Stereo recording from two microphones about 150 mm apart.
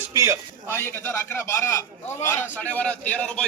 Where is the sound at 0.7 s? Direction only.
15° left (ahead or behind).